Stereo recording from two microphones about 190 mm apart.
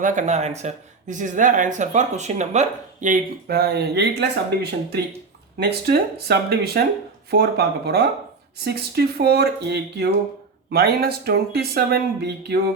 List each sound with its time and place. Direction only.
0.0 s speech: 40° right (ahead or behind); by 12.5 s 60° right (ahead or behind)